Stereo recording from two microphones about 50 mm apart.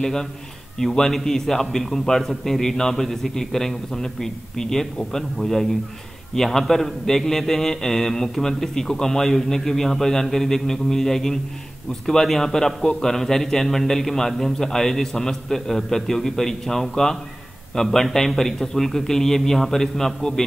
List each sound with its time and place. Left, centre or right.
0.0 s a man's voice: centre